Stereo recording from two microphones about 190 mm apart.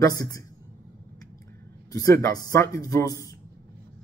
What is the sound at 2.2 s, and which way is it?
Speech, 20° left (ahead or behind).